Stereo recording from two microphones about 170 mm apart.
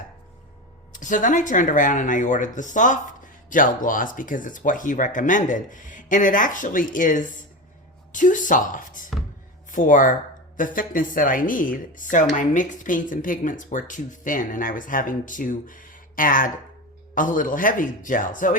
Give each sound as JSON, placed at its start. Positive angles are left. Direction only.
{"t": 0.9, "sound": "speech", "side_deg": 50}